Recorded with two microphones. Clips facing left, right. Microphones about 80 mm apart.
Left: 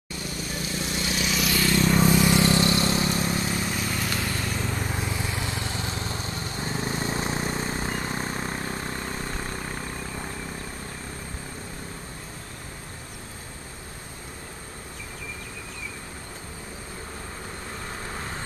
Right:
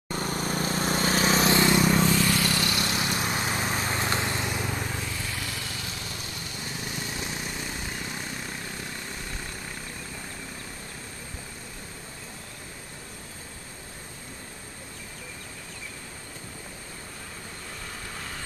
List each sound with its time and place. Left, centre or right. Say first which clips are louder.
0.1 s vehicle: right 5 dB; right
2.0 s vehicle: left 4 dB; centre; by 3.3 s left
3.3 s vehicle: even; right; by 4.7 s centre
4.9 s lawn mower: left 4 dB; left
18.0 s vehicle: left 4 dB; left